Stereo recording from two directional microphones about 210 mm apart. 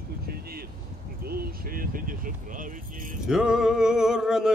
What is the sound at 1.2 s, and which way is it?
Speech, 45° right (ahead or behind).